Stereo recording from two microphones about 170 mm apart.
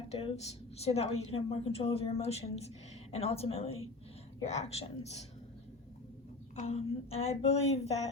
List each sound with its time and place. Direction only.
0.1 s a woman's voice: 40° left (ahead or behind)
6.6 s a woman's voice: 35° left (ahead or behind)